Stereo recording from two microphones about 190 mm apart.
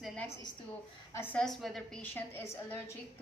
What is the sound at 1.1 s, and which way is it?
A woman's voice, 10° left (ahead or behind).